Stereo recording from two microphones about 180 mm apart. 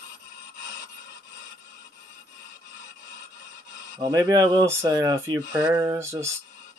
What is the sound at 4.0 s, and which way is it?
Speech, 20° right (ahead or behind).